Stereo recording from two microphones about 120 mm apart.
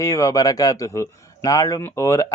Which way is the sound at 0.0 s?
25° left (ahead or behind).